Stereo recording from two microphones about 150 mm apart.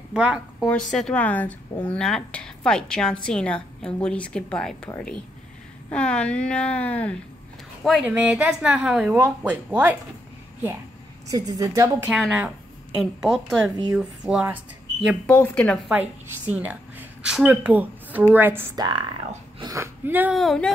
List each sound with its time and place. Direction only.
0.1 s a woman's voice: 5° right (ahead or behind)
8.0 s speech: 10° right (ahead or behind)
11.2 s a woman's voice: 25° right (ahead or behind)
12.1 s speech: 5° right (ahead or behind)
15.2 s a woman's voice: 10° left (ahead or behind)
15.9 s a woman's voice: 10° right (ahead or behind)
18.8 s speech: 30° right (ahead or behind)
19.6 s speech: 20° right (ahead or behind)
20.3 s speech: 5° left (ahead or behind)